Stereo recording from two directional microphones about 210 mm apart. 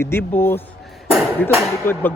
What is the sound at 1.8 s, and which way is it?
Speech, 10° left (ahead or behind).